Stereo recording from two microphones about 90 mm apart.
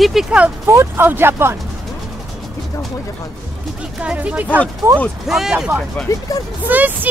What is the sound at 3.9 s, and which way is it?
Speech, 15° right (ahead or behind).